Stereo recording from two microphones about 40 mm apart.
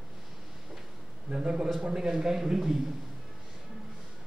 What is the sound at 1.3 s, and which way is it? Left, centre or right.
A man's voice, centre.